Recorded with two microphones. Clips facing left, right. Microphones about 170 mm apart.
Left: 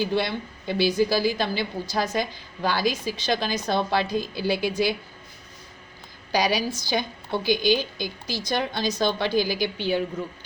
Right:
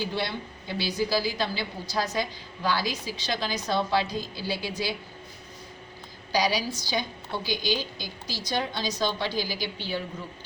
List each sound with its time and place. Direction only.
0.0 s a woman's voice: 55° left (ahead or behind)
6.3 s a woman's voice: 55° left (ahead or behind)